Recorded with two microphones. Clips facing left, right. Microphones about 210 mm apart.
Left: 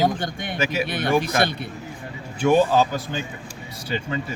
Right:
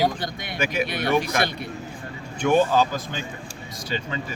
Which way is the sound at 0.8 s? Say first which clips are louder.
Left 1 dB; 50° left (ahead or behind).